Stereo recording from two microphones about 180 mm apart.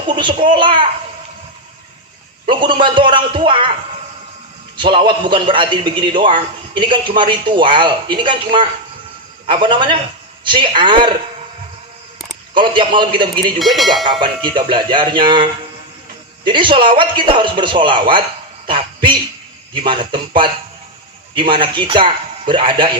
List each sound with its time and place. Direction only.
0.1 s a man's voice: 25° right (ahead or behind)
2.5 s a man's voice: 25° right (ahead or behind)
4.8 s a man's voice: 25° right (ahead or behind)
12.5 s a man's voice: 25° right (ahead or behind)
13.6 s speech: centre (ahead or behind)
14.0 s a man's voice: 25° right (ahead or behind)
16.5 s a man's voice: 25° right (ahead or behind)